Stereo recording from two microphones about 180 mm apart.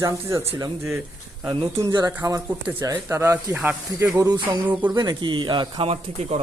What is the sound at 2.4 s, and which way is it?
Speech, 10° right (ahead or behind).